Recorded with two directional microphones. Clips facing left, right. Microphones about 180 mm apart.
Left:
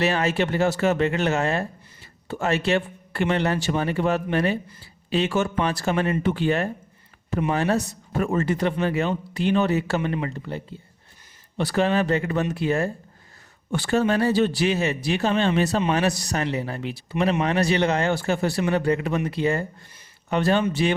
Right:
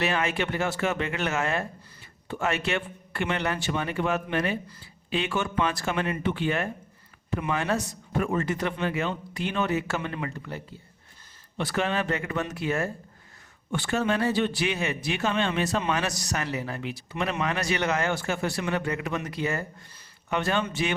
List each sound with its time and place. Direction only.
0.0 s speech: 35° left (ahead or behind)